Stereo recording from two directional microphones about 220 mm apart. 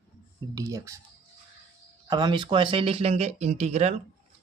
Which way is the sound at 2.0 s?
20° right (ahead or behind).